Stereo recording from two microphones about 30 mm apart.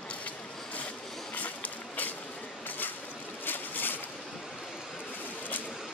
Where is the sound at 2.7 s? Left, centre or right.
Left.